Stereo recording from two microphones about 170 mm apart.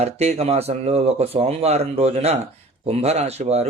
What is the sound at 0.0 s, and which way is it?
Speech, 40° right (ahead or behind).